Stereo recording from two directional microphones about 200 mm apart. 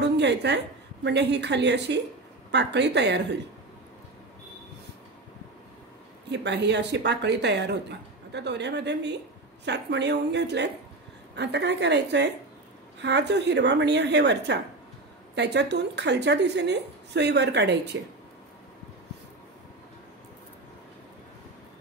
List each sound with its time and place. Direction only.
0.2 s speech: 60° right (ahead or behind)
6.2 s speech: 60° right (ahead or behind)